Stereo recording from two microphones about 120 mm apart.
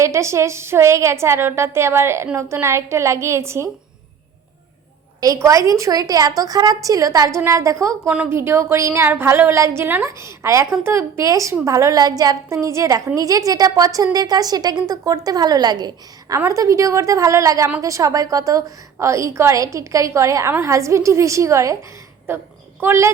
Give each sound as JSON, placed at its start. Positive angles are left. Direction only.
{"t": 0.0, "sound": "a woman's voice", "side_deg": -25}
{"t": 5.2, "sound": "a woman's voice", "side_deg": -30}